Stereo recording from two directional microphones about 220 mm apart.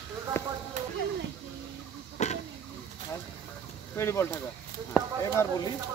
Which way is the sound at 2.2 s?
30° left (ahead or behind).